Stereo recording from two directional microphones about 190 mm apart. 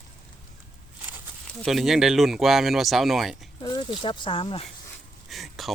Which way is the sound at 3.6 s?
20° left (ahead or behind).